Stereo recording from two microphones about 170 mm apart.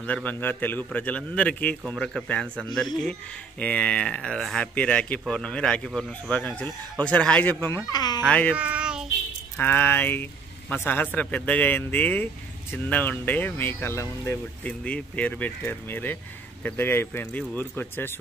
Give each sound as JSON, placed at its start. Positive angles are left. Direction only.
{"t": 0.0, "sound": "speech", "side_deg": 10}
{"t": 7.9, "sound": "speech", "side_deg": 25}
{"t": 8.3, "sound": "speech", "side_deg": 10}
{"t": 8.5, "sound": "child singing", "side_deg": -5}
{"t": 9.6, "sound": "speech", "side_deg": 10}